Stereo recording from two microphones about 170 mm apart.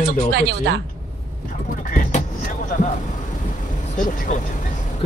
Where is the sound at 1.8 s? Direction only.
50° left (ahead or behind).